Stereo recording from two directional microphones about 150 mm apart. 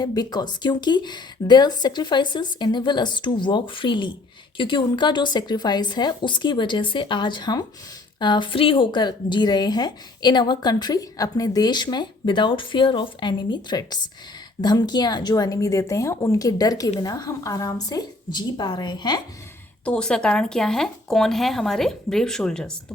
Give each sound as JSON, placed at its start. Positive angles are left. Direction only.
{"t": 0.0, "sound": "a woman's voice", "side_deg": 25}
{"t": 19.8, "sound": "speech", "side_deg": 5}